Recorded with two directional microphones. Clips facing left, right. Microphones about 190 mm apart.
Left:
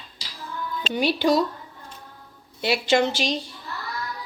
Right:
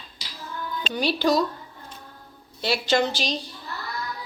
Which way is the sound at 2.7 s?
25° left (ahead or behind).